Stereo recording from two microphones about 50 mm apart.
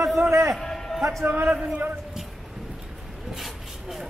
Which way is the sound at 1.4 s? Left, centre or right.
Centre.